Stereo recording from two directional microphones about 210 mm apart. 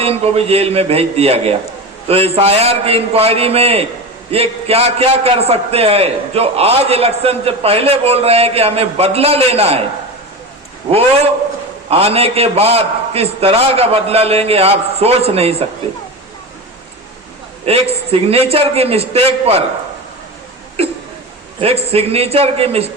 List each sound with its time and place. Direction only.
0.0 s a man's voice: 30° right (ahead or behind)
11.9 s a man's voice: 30° right (ahead or behind)
17.7 s a man's voice: 30° right (ahead or behind)
21.6 s a man's voice: 30° right (ahead or behind)